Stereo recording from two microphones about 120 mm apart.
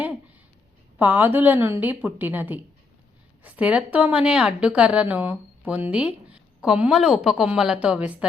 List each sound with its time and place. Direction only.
0.9 s a woman's voice: 15° right (ahead or behind)